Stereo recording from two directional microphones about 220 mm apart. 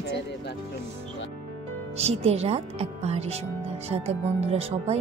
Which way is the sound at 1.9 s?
30° right (ahead or behind).